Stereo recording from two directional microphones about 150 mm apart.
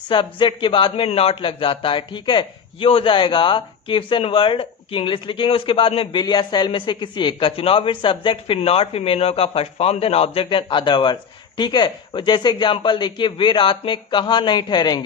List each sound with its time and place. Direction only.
0.1 s speech: 30° left (ahead or behind)